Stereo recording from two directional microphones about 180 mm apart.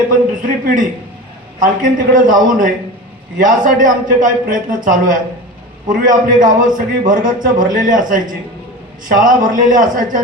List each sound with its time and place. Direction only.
0.1 s a man's voice: 50° right (ahead or behind)